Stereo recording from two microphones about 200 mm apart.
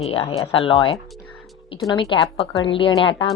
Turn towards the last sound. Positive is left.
turn(degrees=25)  # may be behind; listen again after turning